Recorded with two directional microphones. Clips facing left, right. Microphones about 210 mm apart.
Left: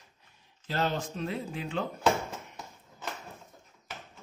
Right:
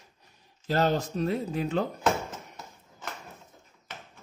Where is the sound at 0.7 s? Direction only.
40° right (ahead or behind).